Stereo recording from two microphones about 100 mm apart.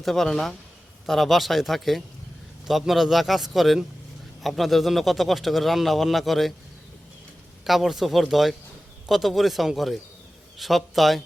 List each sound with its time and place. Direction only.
0.0 s speech: 5° left (ahead or behind)
7.6 s speech: centre (ahead or behind)